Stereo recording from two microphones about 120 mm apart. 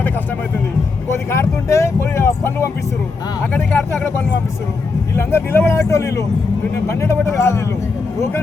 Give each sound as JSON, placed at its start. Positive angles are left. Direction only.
{"t": 1.3, "sound": "vehicle", "side_deg": 25}
{"t": 3.5, "sound": "speech", "side_deg": 15}
{"t": 5.1, "sound": "speech", "side_deg": 20}